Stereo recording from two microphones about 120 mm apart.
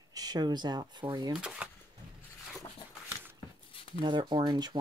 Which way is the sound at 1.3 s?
10° right (ahead or behind).